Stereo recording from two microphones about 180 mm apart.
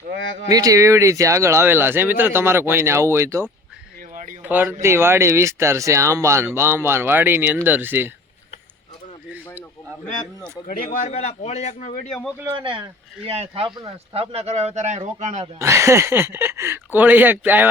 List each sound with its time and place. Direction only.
0.1 s speech: 90° right
0.4 s speech: 20° right (ahead or behind)
4.1 s a sound: 45° right (ahead or behind)
4.4 s speech: 10° right (ahead or behind)
10.7 s speech: 50° left (ahead or behind)
11.0 s a man's voice: 35° left (ahead or behind)
12.5 s speech: 25° right (ahead or behind)
15.5 s speech: 15° right (ahead or behind)